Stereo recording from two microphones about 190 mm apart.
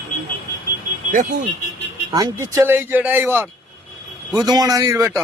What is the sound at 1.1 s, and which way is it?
Speech, 45° right (ahead or behind).